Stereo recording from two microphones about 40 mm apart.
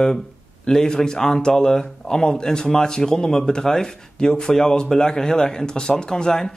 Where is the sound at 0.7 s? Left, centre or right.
Centre.